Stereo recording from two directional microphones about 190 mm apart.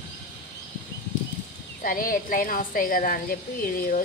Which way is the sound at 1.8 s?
45° left (ahead or behind).